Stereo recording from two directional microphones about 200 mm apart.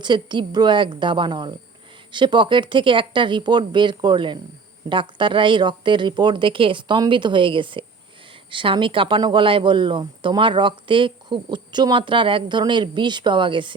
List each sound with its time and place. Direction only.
0.0 s speech: 25° right (ahead or behind)